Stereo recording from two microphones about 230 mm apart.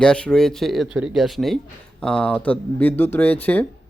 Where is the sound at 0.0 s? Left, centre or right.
Centre.